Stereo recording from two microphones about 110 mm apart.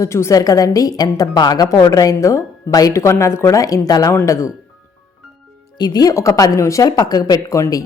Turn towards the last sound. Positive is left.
turn(degrees=30)  # may be behind; listen again after turning